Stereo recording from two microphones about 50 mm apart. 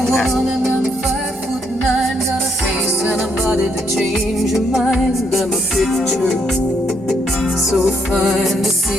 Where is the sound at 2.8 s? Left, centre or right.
Right.